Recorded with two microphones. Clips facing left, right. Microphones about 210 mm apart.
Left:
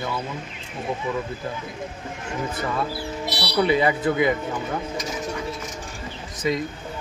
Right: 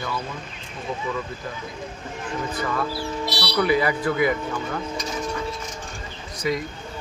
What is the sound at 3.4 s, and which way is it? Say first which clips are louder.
Speech: left 1 dB; 25° left (ahead or behind).